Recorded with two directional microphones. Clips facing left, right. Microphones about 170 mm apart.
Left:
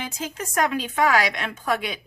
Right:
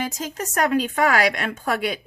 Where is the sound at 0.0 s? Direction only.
45° right (ahead or behind).